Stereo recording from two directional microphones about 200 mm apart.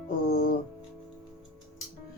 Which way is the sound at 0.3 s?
55° left (ahead or behind).